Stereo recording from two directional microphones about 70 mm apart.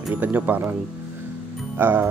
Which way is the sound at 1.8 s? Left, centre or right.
Right.